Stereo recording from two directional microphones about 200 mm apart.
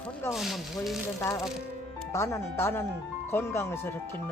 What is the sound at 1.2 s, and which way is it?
Speech, 15° left (ahead or behind).